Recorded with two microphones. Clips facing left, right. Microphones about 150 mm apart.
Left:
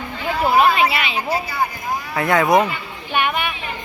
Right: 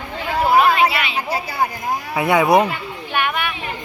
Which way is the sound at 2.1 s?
10° right (ahead or behind).